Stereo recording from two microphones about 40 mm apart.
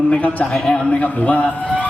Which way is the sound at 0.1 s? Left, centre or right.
Left.